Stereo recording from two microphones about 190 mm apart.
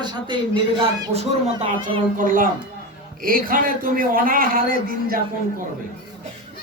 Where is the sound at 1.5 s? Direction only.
30° right (ahead or behind).